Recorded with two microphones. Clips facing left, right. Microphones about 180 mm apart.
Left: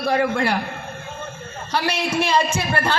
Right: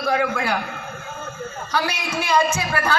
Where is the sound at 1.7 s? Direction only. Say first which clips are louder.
Left 3 dB; 30° left (ahead or behind).